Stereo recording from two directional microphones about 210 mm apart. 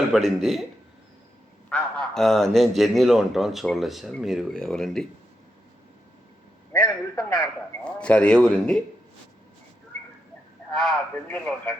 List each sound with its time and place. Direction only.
0.1 s a man's voice: centre (ahead or behind)
1.7 s a man's voice: centre (ahead or behind)
6.8 s a man's voice: 20° left (ahead or behind)
7.9 s a man's voice: 5° left (ahead or behind)
10.8 s a man's voice: 5° left (ahead or behind)